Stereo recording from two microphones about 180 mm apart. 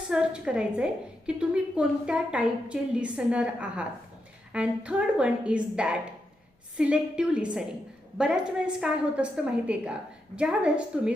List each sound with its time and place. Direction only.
0.1 s a woman's voice: 5° right (ahead or behind)